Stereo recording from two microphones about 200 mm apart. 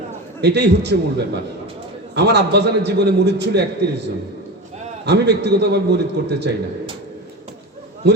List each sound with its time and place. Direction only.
0.4 s a man's voice: 60° right (ahead or behind)